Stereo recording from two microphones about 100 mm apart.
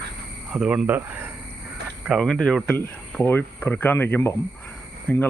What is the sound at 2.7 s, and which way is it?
Speech, 20° left (ahead or behind).